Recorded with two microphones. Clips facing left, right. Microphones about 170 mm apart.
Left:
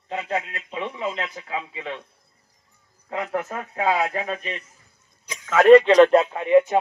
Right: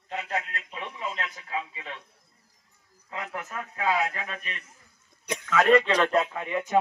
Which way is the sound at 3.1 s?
55° left (ahead or behind).